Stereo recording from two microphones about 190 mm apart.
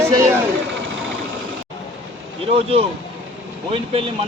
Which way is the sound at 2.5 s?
30° right (ahead or behind).